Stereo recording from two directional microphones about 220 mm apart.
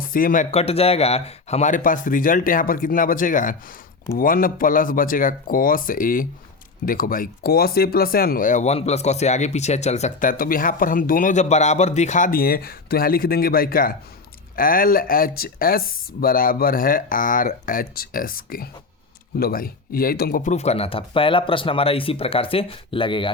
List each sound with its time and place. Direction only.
0.0 s speech: 40° left (ahead or behind); by 23.3 s 20° left (ahead or behind)